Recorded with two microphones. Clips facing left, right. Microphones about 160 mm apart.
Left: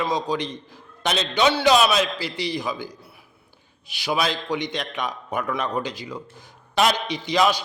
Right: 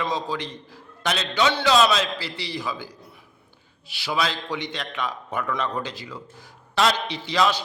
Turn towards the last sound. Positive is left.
turn(degrees=15)  # may be behind; listen again after turning